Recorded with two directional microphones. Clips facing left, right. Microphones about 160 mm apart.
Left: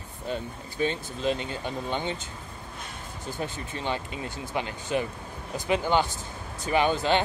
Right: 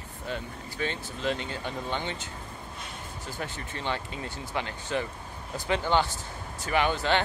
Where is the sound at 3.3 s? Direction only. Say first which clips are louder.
Left 3 dB; 15° left (ahead or behind).